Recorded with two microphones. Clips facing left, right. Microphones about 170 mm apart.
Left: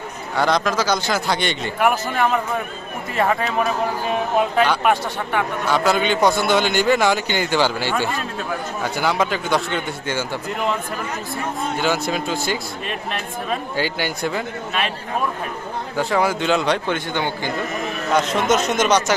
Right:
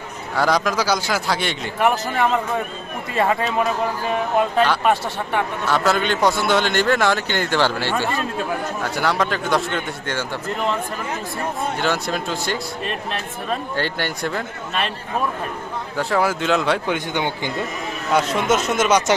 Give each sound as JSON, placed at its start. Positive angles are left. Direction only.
{"t": 0.3, "sound": "a man's voice", "side_deg": -5}
{"t": 4.5, "sound": "a man's voice", "side_deg": 5}
{"t": 11.8, "sound": "a man's voice", "side_deg": 0}
{"t": 16.0, "sound": "a man's voice", "side_deg": 0}
{"t": 16.9, "sound": "speech", "side_deg": -15}
{"t": 18.1, "sound": "a man's voice", "side_deg": -5}